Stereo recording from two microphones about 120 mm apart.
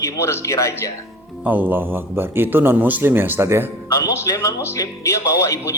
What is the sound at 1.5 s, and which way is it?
A man's voice, 15° right (ahead or behind).